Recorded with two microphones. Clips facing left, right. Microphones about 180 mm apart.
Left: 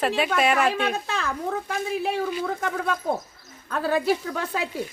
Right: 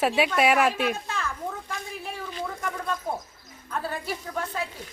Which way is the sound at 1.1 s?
75° left (ahead or behind).